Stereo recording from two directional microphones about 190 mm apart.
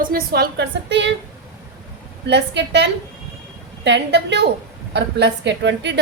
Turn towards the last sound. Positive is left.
turn(degrees=-65)  # may be behind; listen again after turning